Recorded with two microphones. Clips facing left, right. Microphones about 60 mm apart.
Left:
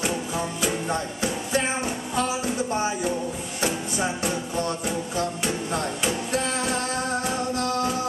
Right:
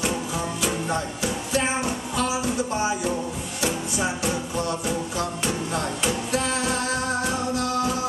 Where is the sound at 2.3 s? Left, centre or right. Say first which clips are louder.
Right 1 dB; centre.